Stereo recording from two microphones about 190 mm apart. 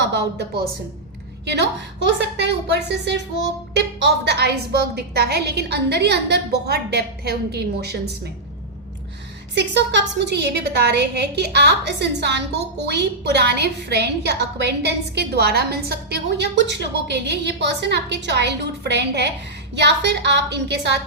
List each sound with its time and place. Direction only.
0.0 s speech: 65° right (ahead or behind)
2.1 s a woman's voice: 65° right (ahead or behind)
9.6 s a woman's voice: 65° right (ahead or behind)